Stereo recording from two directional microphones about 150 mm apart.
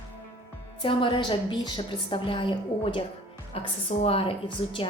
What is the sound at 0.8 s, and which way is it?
A woman's voice, 35° left (ahead or behind).